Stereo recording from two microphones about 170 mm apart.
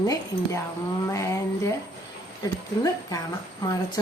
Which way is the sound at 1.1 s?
15° left (ahead or behind).